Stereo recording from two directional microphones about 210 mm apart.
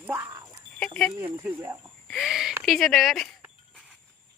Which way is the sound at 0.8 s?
5° left (ahead or behind).